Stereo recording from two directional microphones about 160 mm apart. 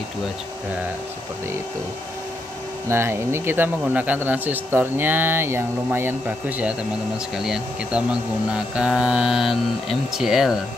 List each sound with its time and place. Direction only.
2.9 s speech: 15° right (ahead or behind)